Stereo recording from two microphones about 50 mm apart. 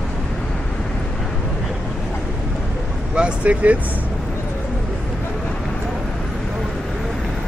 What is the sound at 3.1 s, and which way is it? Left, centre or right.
Vehicle, right.